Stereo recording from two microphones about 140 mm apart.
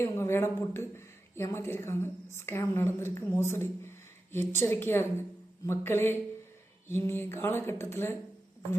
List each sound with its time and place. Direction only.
0.0 s speech: 15° left (ahead or behind)